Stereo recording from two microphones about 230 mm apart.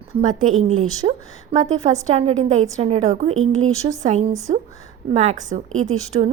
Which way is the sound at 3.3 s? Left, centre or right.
Right.